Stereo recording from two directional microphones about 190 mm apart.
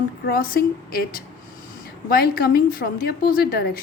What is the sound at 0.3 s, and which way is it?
A woman's voice, 50° left (ahead or behind).